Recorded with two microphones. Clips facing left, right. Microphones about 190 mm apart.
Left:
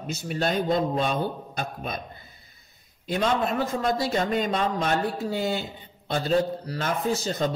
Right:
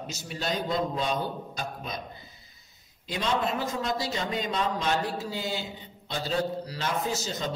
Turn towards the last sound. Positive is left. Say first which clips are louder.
# left 5 dB
turn(degrees=55)  # may be behind; listen again after turning